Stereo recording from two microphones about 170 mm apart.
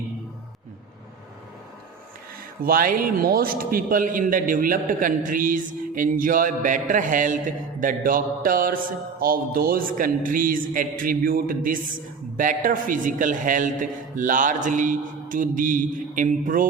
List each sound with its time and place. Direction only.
2.6 s a man's voice: 55° right (ahead or behind)